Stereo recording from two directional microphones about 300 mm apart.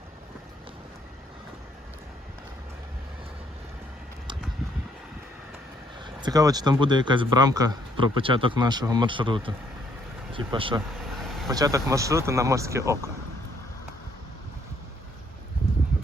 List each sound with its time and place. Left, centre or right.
6.2 s speech: centre
10.9 s vehicle: centre
11.4 s speech: centre